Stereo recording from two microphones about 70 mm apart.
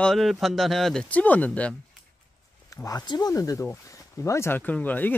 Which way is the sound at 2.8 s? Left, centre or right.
Left.